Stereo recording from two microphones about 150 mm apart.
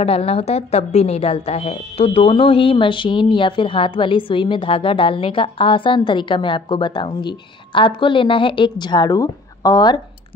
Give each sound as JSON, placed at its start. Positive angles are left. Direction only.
{"t": 0.0, "sound": "speech", "side_deg": 40}